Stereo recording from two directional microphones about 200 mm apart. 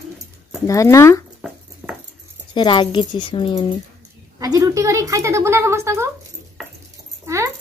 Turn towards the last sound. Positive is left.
turn(degrees=-15)  # may be behind; listen again after turning